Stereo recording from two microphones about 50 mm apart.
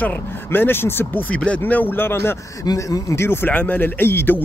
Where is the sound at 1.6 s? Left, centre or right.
Left.